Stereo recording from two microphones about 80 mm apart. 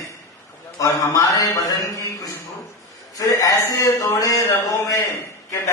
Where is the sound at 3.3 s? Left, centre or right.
Left.